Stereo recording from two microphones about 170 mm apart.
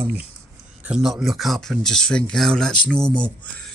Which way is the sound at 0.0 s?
10° right (ahead or behind).